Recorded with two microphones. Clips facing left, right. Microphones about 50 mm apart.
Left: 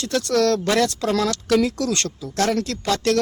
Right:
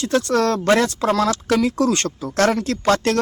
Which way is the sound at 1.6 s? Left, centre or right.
Right.